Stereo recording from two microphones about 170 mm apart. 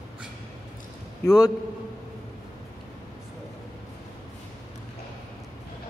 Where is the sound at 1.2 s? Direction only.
20° left (ahead or behind).